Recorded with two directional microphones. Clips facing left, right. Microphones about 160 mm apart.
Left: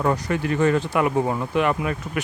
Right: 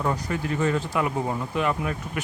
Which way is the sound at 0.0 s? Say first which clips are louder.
Left 4 dB; 70° left (ahead or behind).